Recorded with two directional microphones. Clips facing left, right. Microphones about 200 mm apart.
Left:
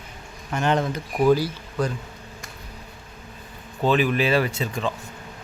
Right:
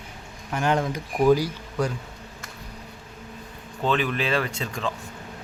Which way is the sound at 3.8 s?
5° left (ahead or behind).